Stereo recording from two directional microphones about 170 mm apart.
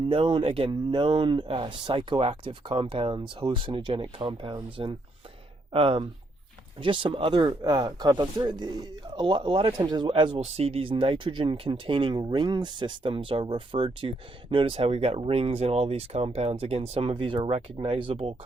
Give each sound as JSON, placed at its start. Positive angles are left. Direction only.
{"t": 0.1, "sound": "speech", "side_deg": -30}